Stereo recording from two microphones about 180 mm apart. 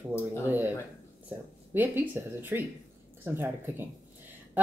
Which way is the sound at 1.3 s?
10° right (ahead or behind).